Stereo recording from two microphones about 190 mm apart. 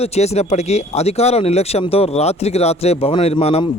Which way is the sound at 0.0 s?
35° left (ahead or behind).